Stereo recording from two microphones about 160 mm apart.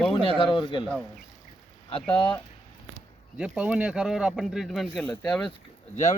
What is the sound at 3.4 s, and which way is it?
Speech, 5° right (ahead or behind).